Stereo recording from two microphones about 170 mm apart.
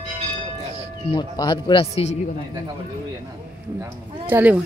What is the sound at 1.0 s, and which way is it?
Speech, 25° left (ahead or behind).